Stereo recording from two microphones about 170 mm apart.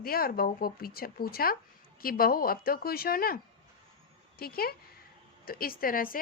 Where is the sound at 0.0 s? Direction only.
60° left (ahead or behind).